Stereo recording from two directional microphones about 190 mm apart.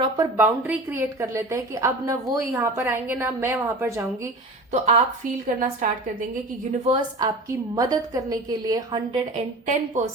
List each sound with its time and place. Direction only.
0.0 s a woman's voice: 15° right (ahead or behind)
4.7 s a woman's voice: 35° right (ahead or behind)
6.8 s a woman's voice: 25° right (ahead or behind)
9.6 s a woman's voice: 40° right (ahead or behind)